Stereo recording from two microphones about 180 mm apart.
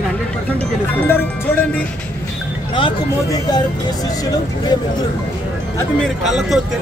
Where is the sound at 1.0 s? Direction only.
10° left (ahead or behind).